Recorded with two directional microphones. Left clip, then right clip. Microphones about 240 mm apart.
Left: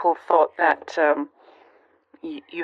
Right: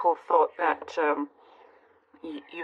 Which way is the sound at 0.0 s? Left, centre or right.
Left.